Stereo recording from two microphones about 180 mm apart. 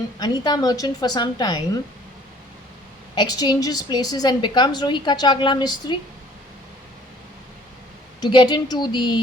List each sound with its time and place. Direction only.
0.2 s a woman's voice: 20° left (ahead or behind)
3.2 s a woman's voice: 20° left (ahead or behind)
8.2 s a woman's voice: 25° left (ahead or behind)